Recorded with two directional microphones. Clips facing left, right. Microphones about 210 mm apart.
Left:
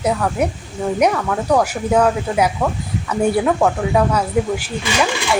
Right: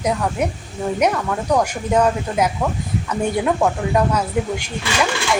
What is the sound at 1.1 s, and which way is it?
Speech, 5° right (ahead or behind).